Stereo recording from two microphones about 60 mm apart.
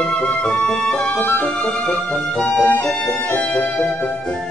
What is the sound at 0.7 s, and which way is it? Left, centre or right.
Music, centre.